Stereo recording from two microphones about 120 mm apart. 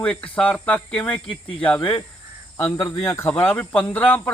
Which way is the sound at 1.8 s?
45° left (ahead or behind).